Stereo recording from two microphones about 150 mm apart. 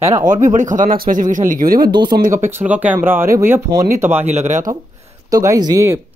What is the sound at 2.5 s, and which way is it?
Speech, 10° right (ahead or behind).